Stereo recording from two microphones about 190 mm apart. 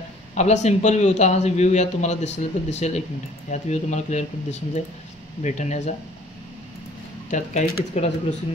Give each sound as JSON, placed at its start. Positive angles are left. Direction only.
{"t": 0.3, "sound": "a man's voice", "side_deg": 35}
{"t": 7.2, "sound": "a man's voice", "side_deg": 40}